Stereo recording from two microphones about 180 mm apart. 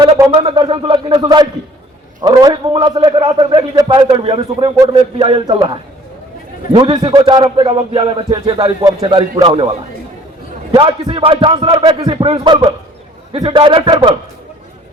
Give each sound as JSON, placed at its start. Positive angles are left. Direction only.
{"t": 0.0, "sound": "a man's voice", "side_deg": -25}
{"t": 6.7, "sound": "a man's voice", "side_deg": -30}
{"t": 10.7, "sound": "a man's voice", "side_deg": -25}